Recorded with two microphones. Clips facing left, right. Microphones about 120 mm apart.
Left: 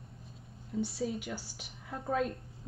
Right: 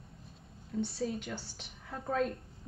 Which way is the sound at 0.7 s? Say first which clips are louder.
Even; centre (ahead or behind).